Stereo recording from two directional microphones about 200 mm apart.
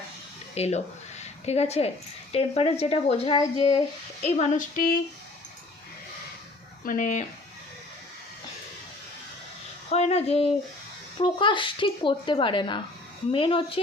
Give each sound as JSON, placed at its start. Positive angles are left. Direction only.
{"t": 0.5, "sound": "speech", "side_deg": 30}
{"t": 1.2, "sound": "a sound", "side_deg": 30}
{"t": 2.3, "sound": "speech", "side_deg": 30}
{"t": 4.2, "sound": "speech", "side_deg": 35}
{"t": 6.8, "sound": "speech", "side_deg": 40}
{"t": 9.9, "sound": "speech", "side_deg": 30}